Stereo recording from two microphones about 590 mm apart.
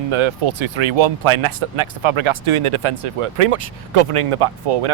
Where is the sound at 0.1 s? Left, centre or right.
Right.